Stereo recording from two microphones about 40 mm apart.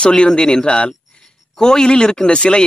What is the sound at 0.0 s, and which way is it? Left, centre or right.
Speech, left.